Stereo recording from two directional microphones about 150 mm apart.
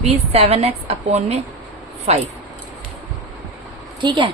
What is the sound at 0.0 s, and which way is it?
A woman's voice, 45° right (ahead or behind).